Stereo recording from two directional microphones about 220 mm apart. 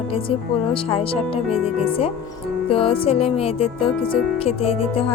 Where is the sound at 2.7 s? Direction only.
25° left (ahead or behind).